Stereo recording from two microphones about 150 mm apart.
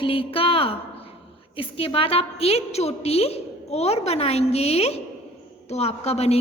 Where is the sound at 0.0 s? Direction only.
35° left (ahead or behind).